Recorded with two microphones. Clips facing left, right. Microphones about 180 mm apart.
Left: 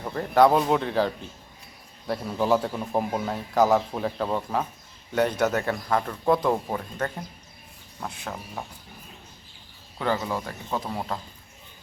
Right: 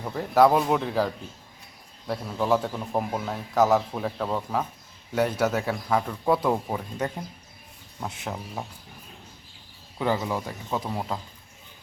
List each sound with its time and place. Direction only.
0.0 s a man's voice: 5° right (ahead or behind)
8.0 s speech: 20° right (ahead or behind)
10.0 s a man's voice: 15° right (ahead or behind)